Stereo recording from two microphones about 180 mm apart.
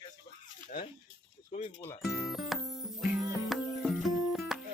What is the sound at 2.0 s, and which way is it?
Music, centre (ahead or behind).